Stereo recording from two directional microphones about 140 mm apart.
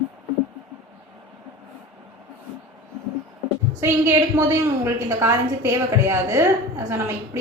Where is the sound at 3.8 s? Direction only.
20° right (ahead or behind).